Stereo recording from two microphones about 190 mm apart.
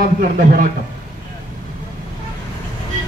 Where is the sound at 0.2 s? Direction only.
45° right (ahead or behind).